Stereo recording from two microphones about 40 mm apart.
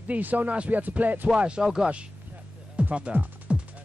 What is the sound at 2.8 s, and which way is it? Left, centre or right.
Speech, right.